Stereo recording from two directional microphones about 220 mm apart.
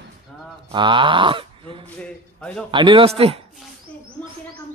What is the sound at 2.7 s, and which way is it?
Speech, 20° right (ahead or behind).